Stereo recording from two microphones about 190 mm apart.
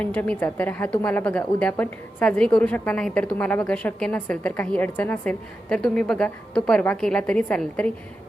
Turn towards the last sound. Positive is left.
turn(degrees=5)  # may be behind; listen again after turning